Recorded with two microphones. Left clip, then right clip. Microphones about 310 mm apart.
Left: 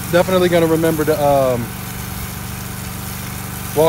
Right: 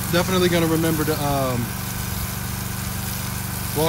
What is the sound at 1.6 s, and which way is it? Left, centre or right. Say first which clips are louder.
Vehicle: left 1 dB; centre.